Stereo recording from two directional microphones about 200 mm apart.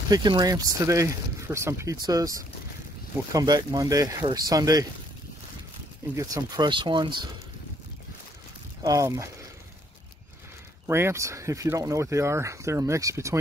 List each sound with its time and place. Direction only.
0.1 s speech: 20° right (ahead or behind)
6.1 s speech: 15° right (ahead or behind)
8.8 s speech: 15° right (ahead or behind)
10.9 s speech: 10° right (ahead or behind)